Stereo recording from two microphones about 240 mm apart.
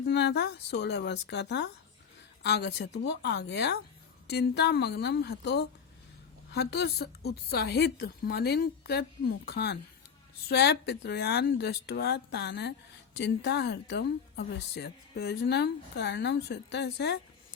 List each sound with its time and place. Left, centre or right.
0.0 s a woman's voice: left